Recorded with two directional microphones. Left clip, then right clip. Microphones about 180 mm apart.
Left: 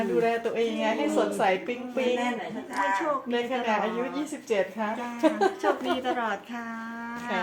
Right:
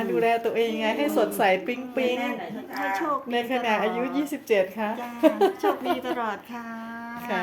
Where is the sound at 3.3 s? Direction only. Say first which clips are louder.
Right 4 dB; 50° right (ahead or behind).